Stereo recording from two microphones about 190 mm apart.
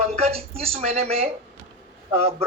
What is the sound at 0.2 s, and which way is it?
A woman's voice, 30° right (ahead or behind).